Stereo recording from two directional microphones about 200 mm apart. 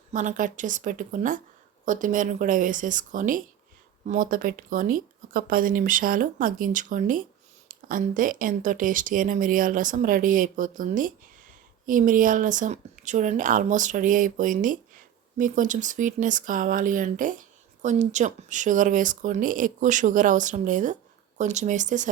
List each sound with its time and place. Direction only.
0.1 s speech: 40° right (ahead or behind)